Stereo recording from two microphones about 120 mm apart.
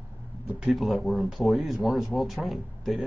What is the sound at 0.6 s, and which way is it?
Speech, centre (ahead or behind).